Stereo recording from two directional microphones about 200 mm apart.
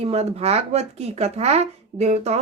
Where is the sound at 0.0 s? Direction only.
30° right (ahead or behind).